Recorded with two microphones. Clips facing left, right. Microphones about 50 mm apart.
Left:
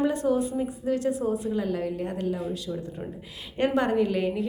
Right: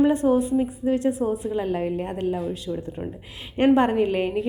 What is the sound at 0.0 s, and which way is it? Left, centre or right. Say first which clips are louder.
A woman's voice: right 5 dB; right.